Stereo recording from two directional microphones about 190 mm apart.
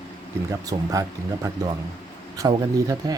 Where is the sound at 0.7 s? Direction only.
30° right (ahead or behind).